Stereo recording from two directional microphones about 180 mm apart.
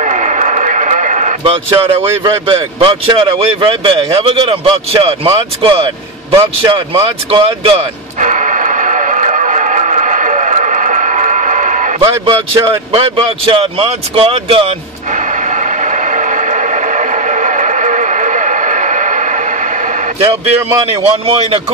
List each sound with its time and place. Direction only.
0.0 s radio: 40° right (ahead or behind)
2.5 s speech: 30° right (ahead or behind)
8.2 s radio: 45° right (ahead or behind)
12.0 s speech: 25° right (ahead or behind)
15.5 s a sound: 40° right (ahead or behind)
21.0 s speech: 35° right (ahead or behind)